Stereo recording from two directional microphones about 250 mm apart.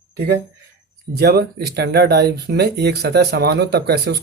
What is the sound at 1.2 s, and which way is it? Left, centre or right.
Speech, right.